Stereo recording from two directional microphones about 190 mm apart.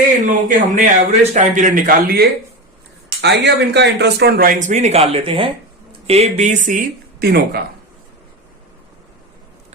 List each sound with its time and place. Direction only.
0.3 s speech: 45° right (ahead or behind)
3.2 s speech: 60° right (ahead or behind)